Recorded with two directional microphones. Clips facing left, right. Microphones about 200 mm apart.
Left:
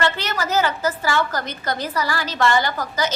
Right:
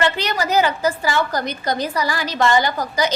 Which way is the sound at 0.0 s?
15° right (ahead or behind).